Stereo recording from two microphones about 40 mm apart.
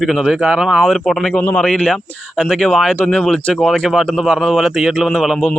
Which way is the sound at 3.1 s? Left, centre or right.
Left.